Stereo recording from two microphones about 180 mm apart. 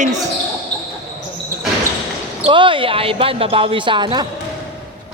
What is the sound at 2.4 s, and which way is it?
Speech, 25° right (ahead or behind).